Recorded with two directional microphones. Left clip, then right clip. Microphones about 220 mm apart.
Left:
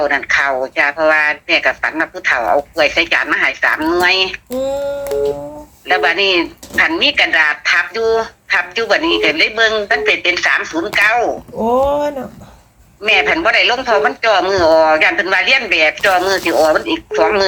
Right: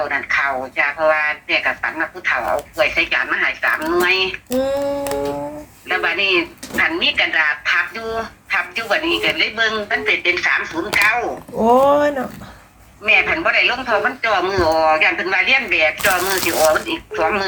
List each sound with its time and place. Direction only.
0.0 s speech: 50° left (ahead or behind)
5.9 s speech: 50° left (ahead or behind)
11.6 s speech: 5° right (ahead or behind)
13.0 s speech: 50° left (ahead or behind)